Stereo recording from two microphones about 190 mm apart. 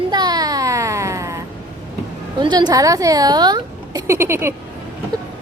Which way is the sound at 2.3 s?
25° right (ahead or behind).